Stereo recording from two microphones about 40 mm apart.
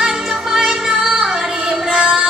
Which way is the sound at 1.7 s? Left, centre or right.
Centre.